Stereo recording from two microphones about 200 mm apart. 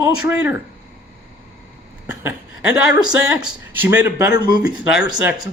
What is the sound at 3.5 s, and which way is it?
Speech, 10° right (ahead or behind).